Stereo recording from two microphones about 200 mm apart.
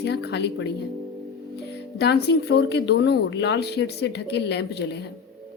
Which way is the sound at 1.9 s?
55° left (ahead or behind).